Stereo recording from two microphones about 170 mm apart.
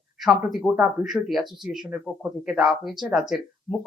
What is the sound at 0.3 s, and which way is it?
Speech, centre (ahead or behind).